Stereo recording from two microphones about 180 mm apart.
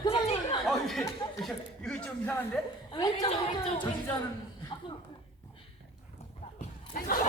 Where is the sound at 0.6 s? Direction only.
Centre (ahead or behind).